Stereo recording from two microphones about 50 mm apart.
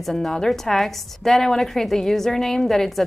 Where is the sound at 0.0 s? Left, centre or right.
Centre.